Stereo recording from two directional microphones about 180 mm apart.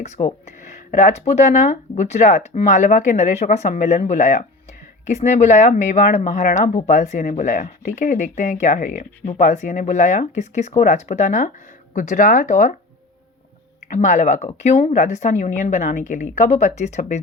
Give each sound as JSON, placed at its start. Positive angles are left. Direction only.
{"t": 0.0, "sound": "speech", "side_deg": 40}
{"t": 13.9, "sound": "speech", "side_deg": 40}